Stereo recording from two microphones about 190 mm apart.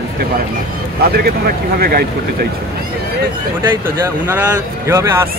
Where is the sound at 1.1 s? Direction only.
55° right (ahead or behind).